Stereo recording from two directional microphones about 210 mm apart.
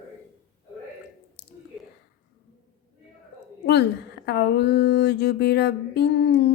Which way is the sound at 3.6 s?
55° left (ahead or behind).